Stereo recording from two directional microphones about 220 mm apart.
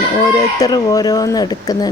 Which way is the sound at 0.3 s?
15° left (ahead or behind).